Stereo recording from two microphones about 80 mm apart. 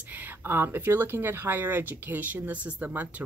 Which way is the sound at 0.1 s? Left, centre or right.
Right.